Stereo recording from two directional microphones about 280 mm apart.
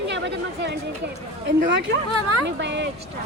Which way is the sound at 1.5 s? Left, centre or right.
Right.